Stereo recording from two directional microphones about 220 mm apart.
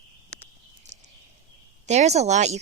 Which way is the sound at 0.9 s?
35° right (ahead or behind).